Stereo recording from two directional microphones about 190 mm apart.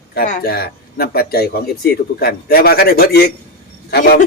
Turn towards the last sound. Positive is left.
turn(degrees=55)  # may be behind; listen again after turning